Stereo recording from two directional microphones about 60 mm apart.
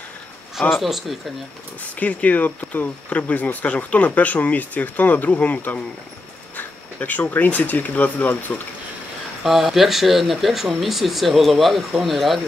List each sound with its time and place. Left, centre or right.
0.6 s speech: centre
2.0 s speech: left
9.4 s speech: centre